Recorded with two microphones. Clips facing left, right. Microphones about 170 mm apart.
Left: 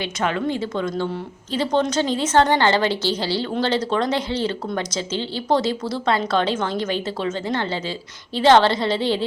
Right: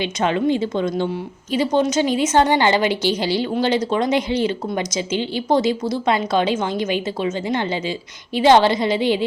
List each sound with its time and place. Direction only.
0.0 s a woman's voice: 20° right (ahead or behind)